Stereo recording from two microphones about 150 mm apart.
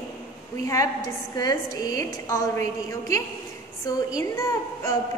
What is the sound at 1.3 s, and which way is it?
A woman's voice, 25° left (ahead or behind).